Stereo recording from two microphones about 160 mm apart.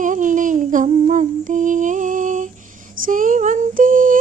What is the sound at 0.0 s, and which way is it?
Humming, 55° right (ahead or behind).